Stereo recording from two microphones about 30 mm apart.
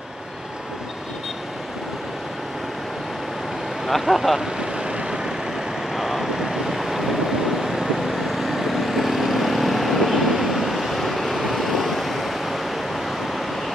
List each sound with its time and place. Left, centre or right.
4.0 s speech: centre
4.4 s vehicle: right
5.9 s waves: centre